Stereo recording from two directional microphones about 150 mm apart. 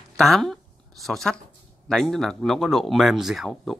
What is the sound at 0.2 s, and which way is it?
A woman's voice, centre (ahead or behind).